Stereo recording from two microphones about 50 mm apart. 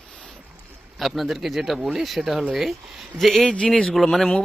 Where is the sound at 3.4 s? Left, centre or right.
Centre.